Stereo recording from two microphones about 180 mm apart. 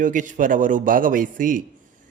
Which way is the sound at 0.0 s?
45° right (ahead or behind).